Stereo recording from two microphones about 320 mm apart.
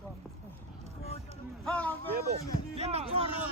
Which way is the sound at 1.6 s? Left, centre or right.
Centre.